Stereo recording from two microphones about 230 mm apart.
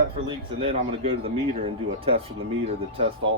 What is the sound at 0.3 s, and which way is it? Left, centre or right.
Speech, right.